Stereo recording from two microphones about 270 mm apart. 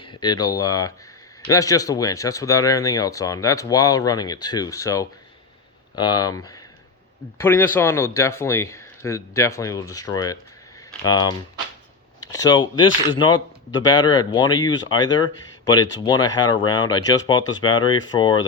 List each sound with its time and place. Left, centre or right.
0.0 s speech: centre